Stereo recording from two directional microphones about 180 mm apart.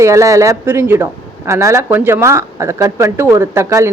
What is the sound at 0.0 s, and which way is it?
Speech, 15° right (ahead or behind).